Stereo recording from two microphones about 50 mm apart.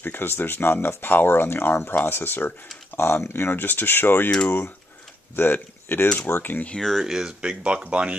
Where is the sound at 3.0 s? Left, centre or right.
Left.